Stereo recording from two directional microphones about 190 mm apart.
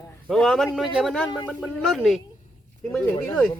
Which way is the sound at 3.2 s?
10° left (ahead or behind).